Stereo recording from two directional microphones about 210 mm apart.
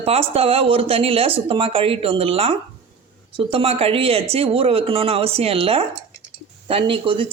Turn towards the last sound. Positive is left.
turn(degrees=-25)  # may be behind; listen again after turning